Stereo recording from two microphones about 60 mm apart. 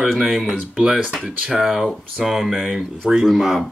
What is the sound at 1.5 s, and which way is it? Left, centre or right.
Speech, centre.